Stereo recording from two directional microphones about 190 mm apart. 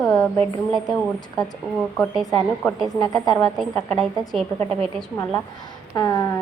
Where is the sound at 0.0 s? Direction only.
15° left (ahead or behind).